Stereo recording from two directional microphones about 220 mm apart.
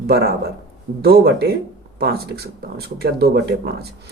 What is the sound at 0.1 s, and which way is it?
Speech, 45° right (ahead or behind).